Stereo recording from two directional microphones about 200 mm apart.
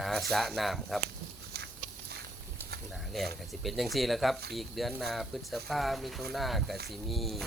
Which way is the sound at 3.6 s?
Centre (ahead or behind).